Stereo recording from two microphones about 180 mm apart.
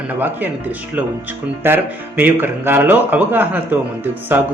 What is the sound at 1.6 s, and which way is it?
Speech, 10° right (ahead or behind).